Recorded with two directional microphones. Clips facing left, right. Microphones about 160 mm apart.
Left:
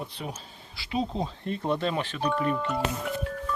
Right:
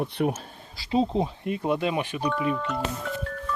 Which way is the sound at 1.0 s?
20° right (ahead or behind).